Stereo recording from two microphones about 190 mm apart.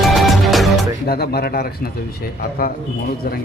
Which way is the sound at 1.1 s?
55° left (ahead or behind).